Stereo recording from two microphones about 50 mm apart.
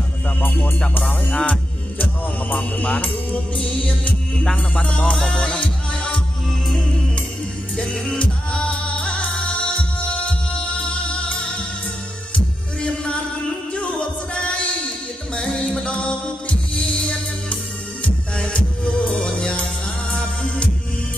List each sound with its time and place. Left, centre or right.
0.4 s music: left
1.3 s music: left
7.7 s music: left
12.8 s music: left